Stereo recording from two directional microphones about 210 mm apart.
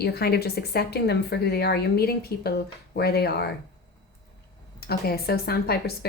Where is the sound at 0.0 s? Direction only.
50° left (ahead or behind).